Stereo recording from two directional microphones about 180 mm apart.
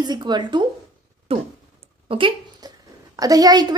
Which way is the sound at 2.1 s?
25° right (ahead or behind).